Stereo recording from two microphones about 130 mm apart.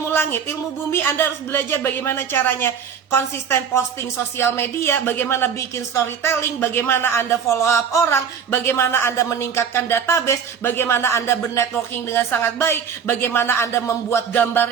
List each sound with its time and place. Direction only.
0.1 s a woman's voice: 15° left (ahead or behind)